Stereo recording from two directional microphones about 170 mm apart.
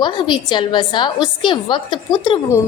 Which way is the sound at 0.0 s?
25° left (ahead or behind).